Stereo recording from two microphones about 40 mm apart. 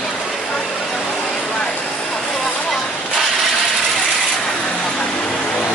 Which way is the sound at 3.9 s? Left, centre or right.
Centre.